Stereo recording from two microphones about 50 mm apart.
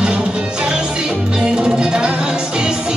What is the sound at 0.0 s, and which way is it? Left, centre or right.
Music, centre.